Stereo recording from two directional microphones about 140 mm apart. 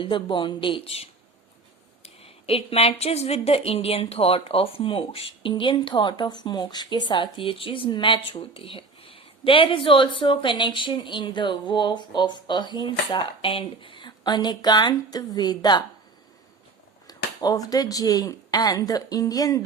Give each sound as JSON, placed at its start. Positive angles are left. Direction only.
{"t": 0.0, "sound": "a woman's voice", "side_deg": 35}
{"t": 2.2, "sound": "a woman's voice", "side_deg": 45}
{"t": 17.1, "sound": "speech", "side_deg": 25}